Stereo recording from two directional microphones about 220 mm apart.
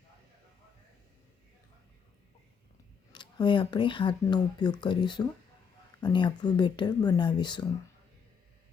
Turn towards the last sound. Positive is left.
turn(degrees=20)  # may be behind; listen again after turning